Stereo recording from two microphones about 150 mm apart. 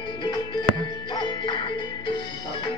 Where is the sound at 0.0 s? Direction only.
30° left (ahead or behind).